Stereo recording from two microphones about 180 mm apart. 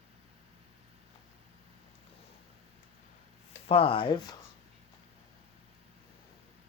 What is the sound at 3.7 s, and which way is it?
Speech, 30° left (ahead or behind).